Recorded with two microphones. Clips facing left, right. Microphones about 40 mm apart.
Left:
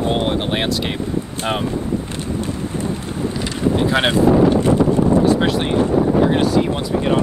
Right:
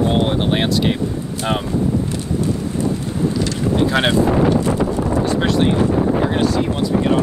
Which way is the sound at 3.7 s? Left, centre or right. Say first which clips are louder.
Right 1 dB; centre.